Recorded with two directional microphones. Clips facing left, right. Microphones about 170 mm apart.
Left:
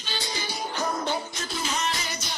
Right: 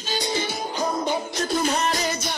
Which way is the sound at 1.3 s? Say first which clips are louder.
Right 8 dB; 50° right (ahead or behind).